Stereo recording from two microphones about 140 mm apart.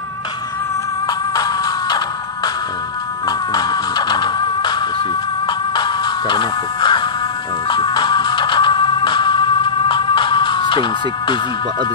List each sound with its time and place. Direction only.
1.0 s music: 25° left (ahead or behind)